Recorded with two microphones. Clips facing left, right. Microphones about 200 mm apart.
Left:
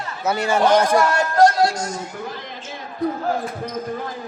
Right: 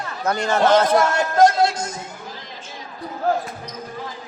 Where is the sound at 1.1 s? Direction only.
20° right (ahead or behind).